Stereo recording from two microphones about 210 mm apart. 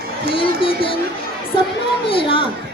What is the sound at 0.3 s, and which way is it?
Speech, 25° left (ahead or behind).